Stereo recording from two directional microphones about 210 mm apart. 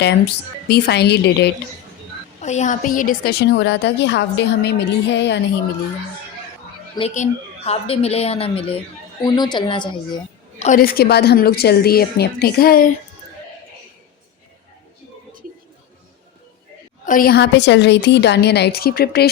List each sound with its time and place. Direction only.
0.7 s a woman's voice: 50° left (ahead or behind)
2.4 s a woman's voice: 35° left (ahead or behind); by 5.4 s 55° left (ahead or behind)
7.1 s a woman's voice: 30° left (ahead or behind)
10.6 s a woman's voice: 40° left (ahead or behind)
17.1 s a woman's voice: 45° left (ahead or behind)